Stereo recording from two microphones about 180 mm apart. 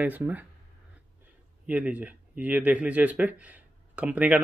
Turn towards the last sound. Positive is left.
turn(degrees=-10)  # may be behind; listen again after turning